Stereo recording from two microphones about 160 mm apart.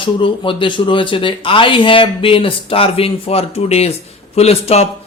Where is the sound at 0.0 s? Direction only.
30° left (ahead or behind).